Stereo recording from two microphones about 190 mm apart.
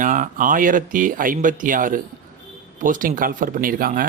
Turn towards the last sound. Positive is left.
turn(degrees=-50)  # may be behind; listen again after turning